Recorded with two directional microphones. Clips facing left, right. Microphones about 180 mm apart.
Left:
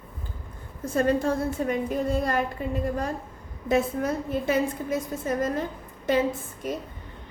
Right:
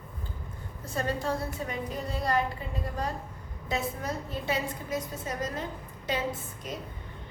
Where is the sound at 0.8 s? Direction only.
50° left (ahead or behind).